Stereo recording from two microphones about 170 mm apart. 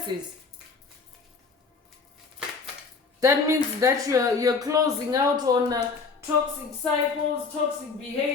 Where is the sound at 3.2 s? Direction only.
15° right (ahead or behind).